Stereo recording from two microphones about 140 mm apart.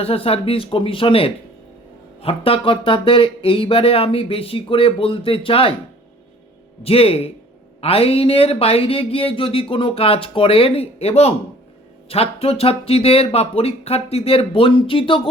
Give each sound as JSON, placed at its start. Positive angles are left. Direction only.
{"t": 0.0, "sound": "speech", "side_deg": 45}
{"t": 6.8, "sound": "speech", "side_deg": 45}